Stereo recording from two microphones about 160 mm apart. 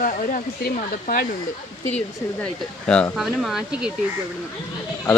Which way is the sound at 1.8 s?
10° left (ahead or behind).